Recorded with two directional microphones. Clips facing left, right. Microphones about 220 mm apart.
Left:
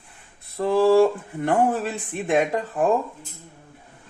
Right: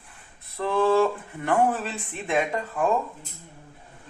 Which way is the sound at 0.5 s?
15° left (ahead or behind).